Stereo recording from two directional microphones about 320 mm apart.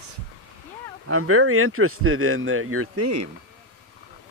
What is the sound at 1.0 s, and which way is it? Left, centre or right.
Speech, right.